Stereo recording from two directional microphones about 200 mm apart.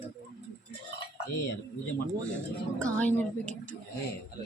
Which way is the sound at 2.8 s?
5° left (ahead or behind).